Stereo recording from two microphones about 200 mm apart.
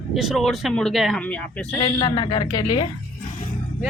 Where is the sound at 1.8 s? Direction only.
20° left (ahead or behind).